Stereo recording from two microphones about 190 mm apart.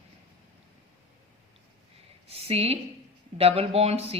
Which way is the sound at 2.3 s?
30° right (ahead or behind).